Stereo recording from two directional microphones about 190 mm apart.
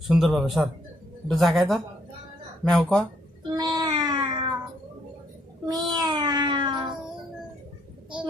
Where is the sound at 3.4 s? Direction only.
20° right (ahead or behind).